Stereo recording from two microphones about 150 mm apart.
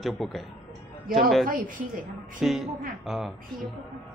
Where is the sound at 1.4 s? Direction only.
65° right (ahead or behind).